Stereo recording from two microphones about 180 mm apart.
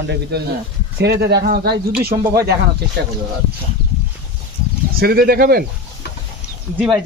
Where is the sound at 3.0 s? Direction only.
70° right (ahead or behind).